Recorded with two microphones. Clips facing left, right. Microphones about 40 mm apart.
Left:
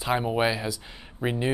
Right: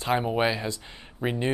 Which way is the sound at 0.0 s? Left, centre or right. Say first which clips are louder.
Even; centre.